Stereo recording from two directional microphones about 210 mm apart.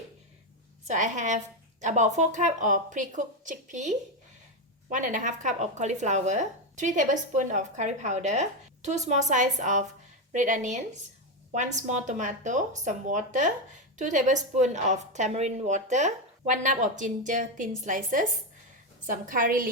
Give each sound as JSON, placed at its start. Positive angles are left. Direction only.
{"t": 0.9, "sound": "a woman's voice", "side_deg": -35}